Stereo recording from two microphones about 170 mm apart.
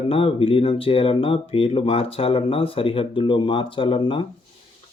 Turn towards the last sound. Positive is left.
turn(degrees=30)  # may be behind; listen again after turning